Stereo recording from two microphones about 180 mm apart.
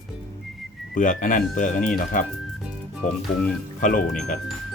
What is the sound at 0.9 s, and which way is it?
Speech, 45° left (ahead or behind).